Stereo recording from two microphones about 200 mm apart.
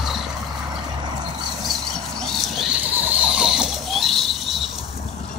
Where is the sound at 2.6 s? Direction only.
5° right (ahead or behind).